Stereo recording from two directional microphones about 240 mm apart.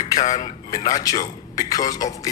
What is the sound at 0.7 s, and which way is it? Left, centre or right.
Speech, centre.